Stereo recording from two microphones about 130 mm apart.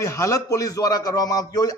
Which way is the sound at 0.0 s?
20° left (ahead or behind).